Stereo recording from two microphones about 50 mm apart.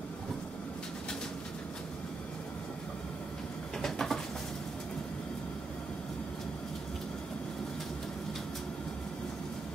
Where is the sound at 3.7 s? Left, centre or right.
Centre.